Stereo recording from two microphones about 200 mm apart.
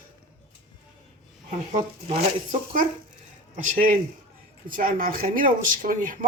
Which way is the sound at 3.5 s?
40° right (ahead or behind).